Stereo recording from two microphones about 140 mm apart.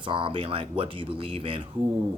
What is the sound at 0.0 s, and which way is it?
Speech, 40° right (ahead or behind).